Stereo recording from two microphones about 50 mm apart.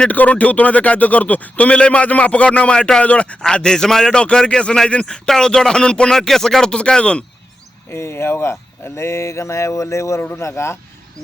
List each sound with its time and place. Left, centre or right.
0.1 s speech: left
3.4 s a man's voice: centre
7.9 s speech: left
10.3 s speech: left